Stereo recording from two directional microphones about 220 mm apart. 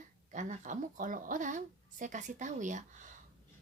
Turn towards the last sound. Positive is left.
turn(degrees=-35)  # may be behind; listen again after turning